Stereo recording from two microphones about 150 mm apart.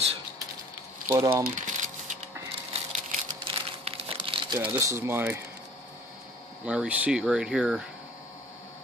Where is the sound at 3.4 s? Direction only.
35° right (ahead or behind).